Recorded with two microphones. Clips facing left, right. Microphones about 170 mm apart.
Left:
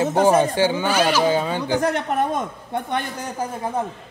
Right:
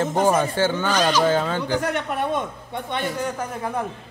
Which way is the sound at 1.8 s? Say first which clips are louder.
Left 3 dB; 40° left (ahead or behind).